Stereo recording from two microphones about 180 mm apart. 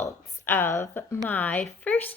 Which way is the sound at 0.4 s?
10° left (ahead or behind).